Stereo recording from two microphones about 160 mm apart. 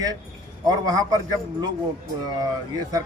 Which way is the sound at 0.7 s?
25° right (ahead or behind).